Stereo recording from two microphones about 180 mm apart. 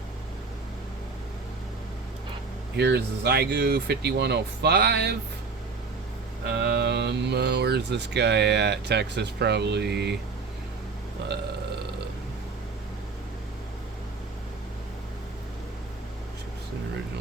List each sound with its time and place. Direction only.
2.7 s speech: 65° right (ahead or behind)
6.5 s speech: 65° right (ahead or behind)